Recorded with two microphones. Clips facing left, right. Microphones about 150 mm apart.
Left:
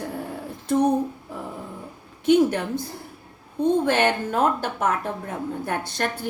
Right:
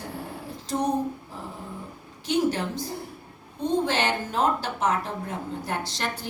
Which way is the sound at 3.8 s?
55° left (ahead or behind).